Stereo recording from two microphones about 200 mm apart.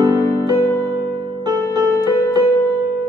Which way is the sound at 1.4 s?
20° right (ahead or behind).